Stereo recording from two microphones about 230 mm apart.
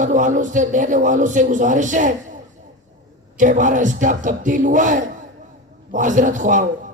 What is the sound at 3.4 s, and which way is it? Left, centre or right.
Speech, right.